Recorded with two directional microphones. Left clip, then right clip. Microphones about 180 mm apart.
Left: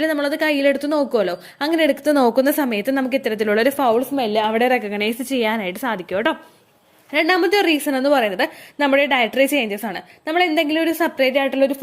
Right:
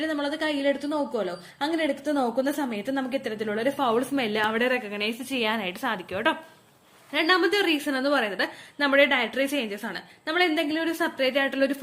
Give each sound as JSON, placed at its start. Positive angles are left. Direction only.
{"t": 0.0, "sound": "a woman's voice", "side_deg": 45}
{"t": 4.3, "sound": "a woman's voice", "side_deg": 25}